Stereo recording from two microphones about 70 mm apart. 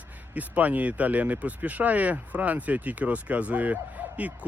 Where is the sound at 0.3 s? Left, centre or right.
Right.